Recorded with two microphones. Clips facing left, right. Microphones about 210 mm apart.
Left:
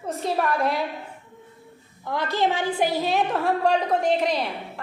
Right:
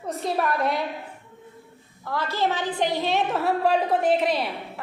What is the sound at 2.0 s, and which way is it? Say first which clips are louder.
A woman's voice: left 2 dB; 15° left (ahead or behind).